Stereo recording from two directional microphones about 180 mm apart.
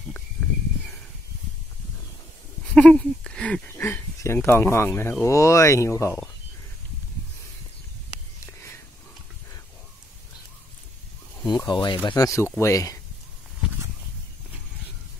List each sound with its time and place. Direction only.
2.7 s speech: 5° left (ahead or behind)
11.3 s speech: 25° left (ahead or behind)